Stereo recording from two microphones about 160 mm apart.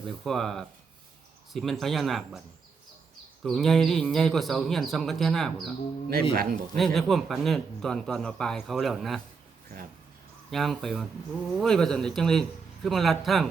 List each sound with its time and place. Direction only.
0.0 s a man's voice: centre (ahead or behind)
3.4 s a man's voice: centre (ahead or behind)
6.3 s a man's voice: 65° right (ahead or behind)
6.7 s a man's voice: centre (ahead or behind)
10.5 s a man's voice: centre (ahead or behind)